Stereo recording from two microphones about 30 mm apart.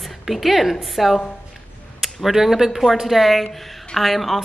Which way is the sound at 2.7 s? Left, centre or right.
Centre.